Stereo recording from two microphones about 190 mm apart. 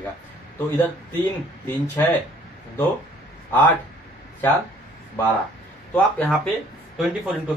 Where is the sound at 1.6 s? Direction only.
10° left (ahead or behind).